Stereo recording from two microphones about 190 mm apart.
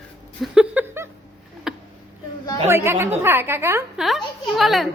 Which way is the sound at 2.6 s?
15° right (ahead or behind).